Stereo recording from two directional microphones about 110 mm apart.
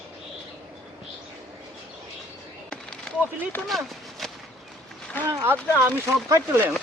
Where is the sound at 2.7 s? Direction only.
5° left (ahead or behind).